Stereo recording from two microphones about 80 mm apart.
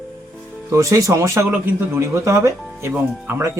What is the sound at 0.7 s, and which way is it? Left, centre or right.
Speech, right.